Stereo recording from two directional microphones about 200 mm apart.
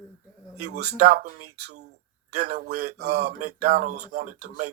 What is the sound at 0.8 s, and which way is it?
Speech, 35° right (ahead or behind).